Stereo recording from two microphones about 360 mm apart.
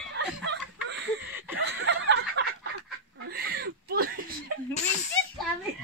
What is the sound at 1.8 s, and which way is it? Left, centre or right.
Snicker, right.